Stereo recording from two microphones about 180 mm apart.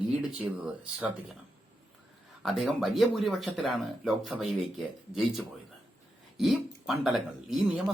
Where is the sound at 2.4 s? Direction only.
Centre (ahead or behind).